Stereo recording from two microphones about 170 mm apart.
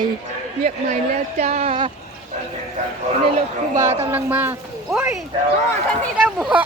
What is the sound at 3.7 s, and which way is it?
Speech, 20° right (ahead or behind).